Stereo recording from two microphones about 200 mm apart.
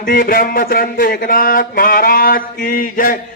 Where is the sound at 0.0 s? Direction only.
45° left (ahead or behind).